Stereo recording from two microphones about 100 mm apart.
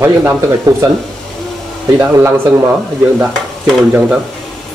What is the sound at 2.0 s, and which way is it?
Speech, 25° right (ahead or behind).